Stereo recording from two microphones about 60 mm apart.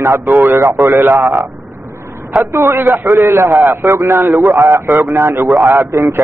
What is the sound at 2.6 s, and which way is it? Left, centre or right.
A man's voice, right.